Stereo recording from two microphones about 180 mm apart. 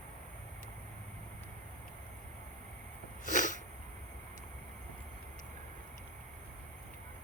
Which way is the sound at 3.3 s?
45° left (ahead or behind).